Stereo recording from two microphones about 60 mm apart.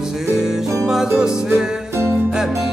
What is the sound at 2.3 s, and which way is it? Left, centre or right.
Music, centre.